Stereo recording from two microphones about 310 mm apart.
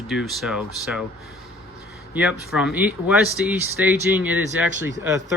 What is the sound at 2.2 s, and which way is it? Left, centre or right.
Speech, centre.